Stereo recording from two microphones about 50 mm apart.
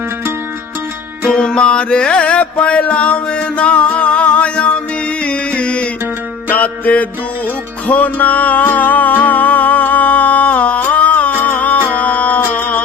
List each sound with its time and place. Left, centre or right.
1.3 s music: centre; by 12.8 s left